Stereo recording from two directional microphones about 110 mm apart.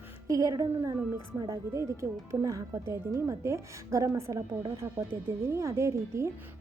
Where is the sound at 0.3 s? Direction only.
30° right (ahead or behind).